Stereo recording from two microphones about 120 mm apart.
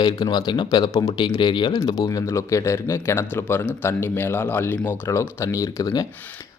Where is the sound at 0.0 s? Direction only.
35° left (ahead or behind).